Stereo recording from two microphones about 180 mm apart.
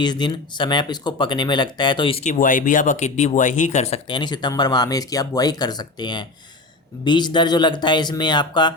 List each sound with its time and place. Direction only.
0.0 s speech: 25° left (ahead or behind)
2.3 s speech: 45° left (ahead or behind); by 8.7 s 25° left (ahead or behind)